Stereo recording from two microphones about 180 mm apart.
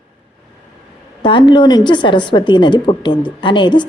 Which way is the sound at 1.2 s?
25° left (ahead or behind).